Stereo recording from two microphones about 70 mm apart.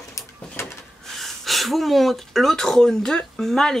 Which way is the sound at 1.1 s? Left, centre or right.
Centre.